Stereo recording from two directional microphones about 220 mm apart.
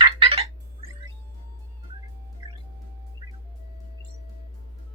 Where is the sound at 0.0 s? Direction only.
25° right (ahead or behind).